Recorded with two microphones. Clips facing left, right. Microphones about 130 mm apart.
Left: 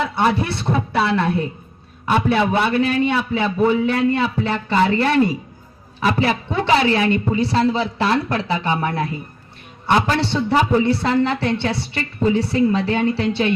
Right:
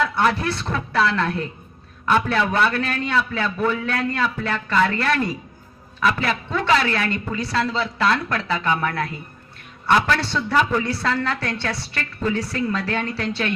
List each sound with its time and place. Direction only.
0.0 s a man's voice: 25° left (ahead or behind)